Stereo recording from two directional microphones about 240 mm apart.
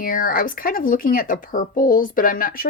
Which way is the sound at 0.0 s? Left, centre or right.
Left.